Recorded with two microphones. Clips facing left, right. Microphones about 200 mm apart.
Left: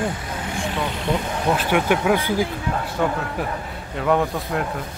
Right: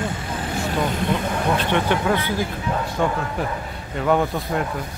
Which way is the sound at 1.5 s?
10° left (ahead or behind).